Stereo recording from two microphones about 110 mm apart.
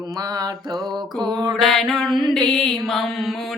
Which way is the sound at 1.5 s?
Centre (ahead or behind).